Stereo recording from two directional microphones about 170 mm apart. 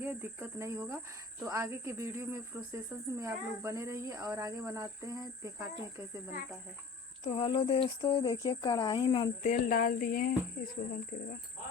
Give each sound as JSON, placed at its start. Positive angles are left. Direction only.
{"t": 0.0, "sound": "speech", "side_deg": -10}
{"t": 7.3, "sound": "speech", "side_deg": 30}
{"t": 9.4, "sound": "cricket", "side_deg": 50}